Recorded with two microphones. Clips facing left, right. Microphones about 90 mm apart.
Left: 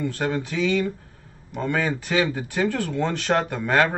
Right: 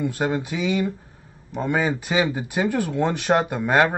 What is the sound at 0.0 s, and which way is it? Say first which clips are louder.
Speech: right 2 dB; 15° right (ahead or behind).